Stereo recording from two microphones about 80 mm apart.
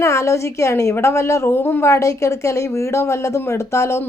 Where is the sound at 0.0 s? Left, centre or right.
Left.